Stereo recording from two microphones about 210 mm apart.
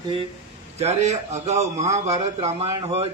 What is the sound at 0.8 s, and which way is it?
A man's voice, 30° right (ahead or behind).